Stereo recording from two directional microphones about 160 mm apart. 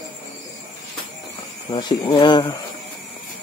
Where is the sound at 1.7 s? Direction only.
30° left (ahead or behind).